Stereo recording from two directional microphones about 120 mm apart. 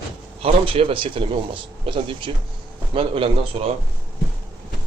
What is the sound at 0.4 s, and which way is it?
Speech, 50° right (ahead or behind).